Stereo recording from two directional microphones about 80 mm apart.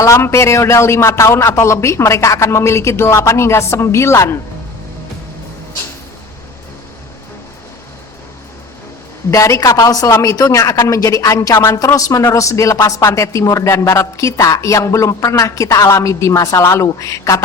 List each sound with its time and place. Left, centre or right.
0.0 s speech: left
9.3 s a man's voice: left